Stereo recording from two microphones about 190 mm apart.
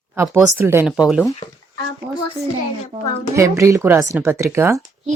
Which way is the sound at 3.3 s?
15° right (ahead or behind).